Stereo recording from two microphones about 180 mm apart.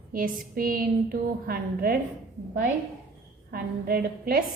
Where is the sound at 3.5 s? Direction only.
55° right (ahead or behind).